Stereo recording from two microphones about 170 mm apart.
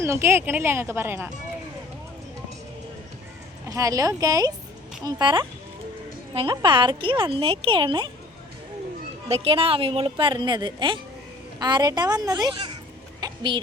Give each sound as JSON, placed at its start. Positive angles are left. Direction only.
{"t": 0.0, "sound": "speech", "side_deg": -15}
{"t": 3.7, "sound": "speech", "side_deg": -20}
{"t": 9.3, "sound": "speech", "side_deg": -35}
{"t": 13.1, "sound": "a sound", "side_deg": -25}